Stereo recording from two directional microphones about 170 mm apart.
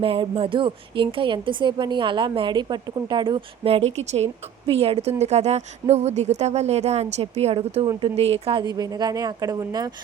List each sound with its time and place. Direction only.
0.0 s a woman's voice: 30° right (ahead or behind)